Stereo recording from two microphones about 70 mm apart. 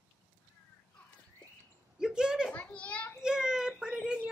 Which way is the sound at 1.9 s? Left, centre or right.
Centre.